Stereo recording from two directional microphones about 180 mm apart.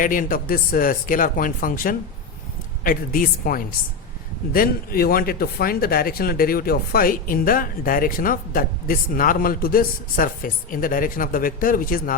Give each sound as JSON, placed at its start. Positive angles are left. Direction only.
{"t": 0.0, "sound": "speech", "side_deg": 50}